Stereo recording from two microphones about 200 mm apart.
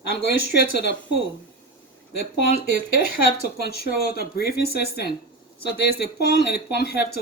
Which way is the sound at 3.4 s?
50° left (ahead or behind).